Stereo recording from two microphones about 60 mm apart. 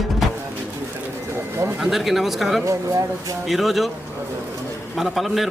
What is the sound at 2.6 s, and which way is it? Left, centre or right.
Speech, right.